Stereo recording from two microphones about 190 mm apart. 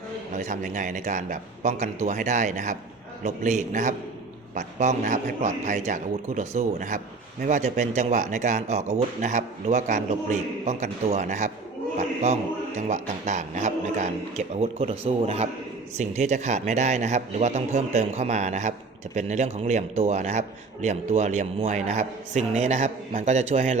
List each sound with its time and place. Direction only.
0.3 s speech: 40° right (ahead or behind)